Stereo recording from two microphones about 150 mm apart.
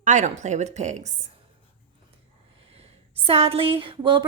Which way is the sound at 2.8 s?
40° right (ahead or behind).